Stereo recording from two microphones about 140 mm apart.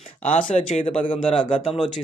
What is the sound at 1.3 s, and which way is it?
Speech, 35° left (ahead or behind).